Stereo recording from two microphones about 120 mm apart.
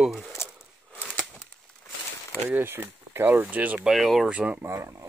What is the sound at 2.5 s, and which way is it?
Speech, 15° right (ahead or behind).